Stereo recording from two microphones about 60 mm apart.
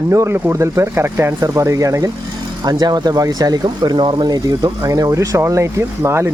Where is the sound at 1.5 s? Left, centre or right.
Right.